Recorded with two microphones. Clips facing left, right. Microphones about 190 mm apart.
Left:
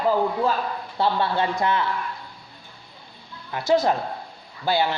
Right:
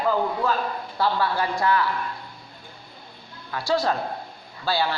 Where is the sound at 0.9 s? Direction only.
25° left (ahead or behind).